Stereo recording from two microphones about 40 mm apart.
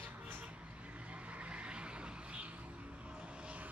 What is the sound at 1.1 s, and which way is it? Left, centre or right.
Vehicle, right.